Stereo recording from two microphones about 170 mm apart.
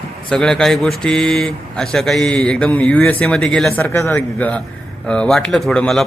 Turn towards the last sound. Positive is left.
turn(degrees=5)  # may be behind; listen again after turning